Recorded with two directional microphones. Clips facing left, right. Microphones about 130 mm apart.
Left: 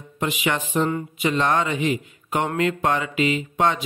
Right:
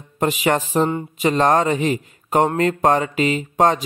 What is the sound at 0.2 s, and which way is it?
Speech, 40° right (ahead or behind).